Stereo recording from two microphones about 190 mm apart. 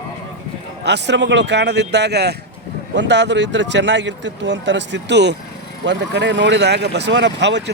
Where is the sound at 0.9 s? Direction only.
65° right (ahead or behind).